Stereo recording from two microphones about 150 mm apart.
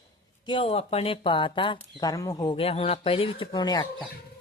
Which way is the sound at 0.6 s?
40° left (ahead or behind).